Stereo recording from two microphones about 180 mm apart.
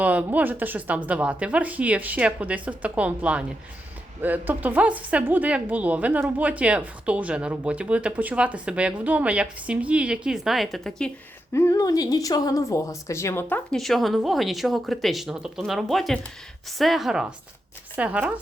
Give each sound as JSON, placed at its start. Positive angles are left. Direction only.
{"t": 0.0, "sound": "a woman's voice", "side_deg": -10}
{"t": 11.5, "sound": "a woman's voice", "side_deg": 15}